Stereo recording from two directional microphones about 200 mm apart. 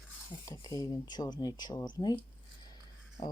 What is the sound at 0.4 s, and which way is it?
Speech, 15° left (ahead or behind).